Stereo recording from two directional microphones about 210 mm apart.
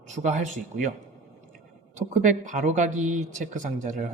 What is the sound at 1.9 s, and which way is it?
A man's voice, 35° right (ahead or behind).